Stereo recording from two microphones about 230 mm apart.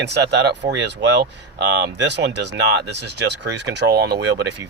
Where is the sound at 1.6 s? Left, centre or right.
Right.